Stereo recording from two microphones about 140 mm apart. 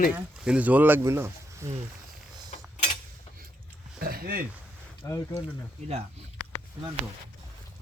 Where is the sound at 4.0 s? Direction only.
90° right.